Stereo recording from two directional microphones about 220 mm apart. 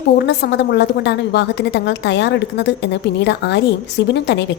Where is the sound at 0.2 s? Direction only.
50° left (ahead or behind).